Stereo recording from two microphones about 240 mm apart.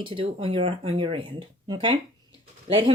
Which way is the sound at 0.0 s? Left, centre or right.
Right.